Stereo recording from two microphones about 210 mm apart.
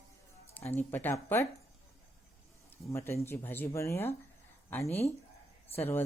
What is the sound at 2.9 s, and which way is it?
Speech, 10° left (ahead or behind).